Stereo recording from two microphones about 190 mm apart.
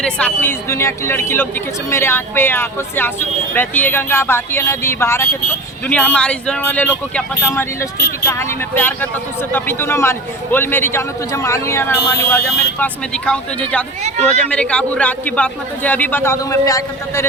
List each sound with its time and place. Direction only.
0.0 s a man's voice: 5° left (ahead or behind)